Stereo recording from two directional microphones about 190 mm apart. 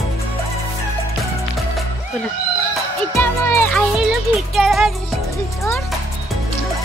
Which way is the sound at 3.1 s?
10° left (ahead or behind).